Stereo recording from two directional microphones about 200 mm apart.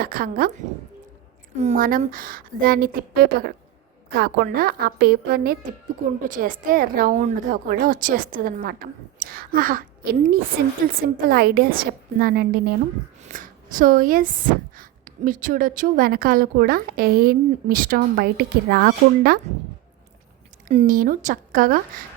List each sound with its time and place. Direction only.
0.0 s a woman's voice: 45° right (ahead or behind)
1.5 s a woman's voice: 40° right (ahead or behind)
20.7 s a woman's voice: 40° right (ahead or behind)